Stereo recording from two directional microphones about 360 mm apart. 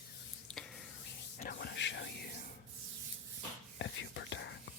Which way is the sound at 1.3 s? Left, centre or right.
Left.